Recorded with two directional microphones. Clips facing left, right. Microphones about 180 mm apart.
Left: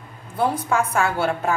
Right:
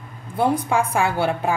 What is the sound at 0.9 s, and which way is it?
Speech, 15° right (ahead or behind).